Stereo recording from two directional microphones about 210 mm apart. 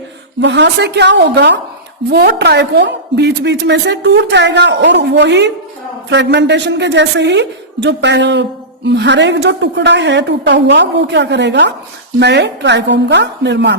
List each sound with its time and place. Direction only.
0.4 s a woman's voice: 55° right (ahead or behind)